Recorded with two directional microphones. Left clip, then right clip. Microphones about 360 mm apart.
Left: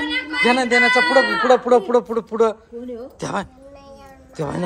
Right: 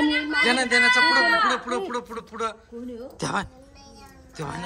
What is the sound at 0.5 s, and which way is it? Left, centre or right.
A man's voice, centre.